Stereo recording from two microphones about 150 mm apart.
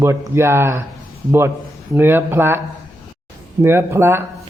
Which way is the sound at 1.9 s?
15° right (ahead or behind).